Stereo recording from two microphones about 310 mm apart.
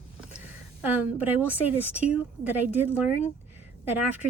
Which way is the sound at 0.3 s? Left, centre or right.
Centre.